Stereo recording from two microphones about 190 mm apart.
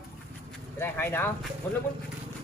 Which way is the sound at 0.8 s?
10° left (ahead or behind).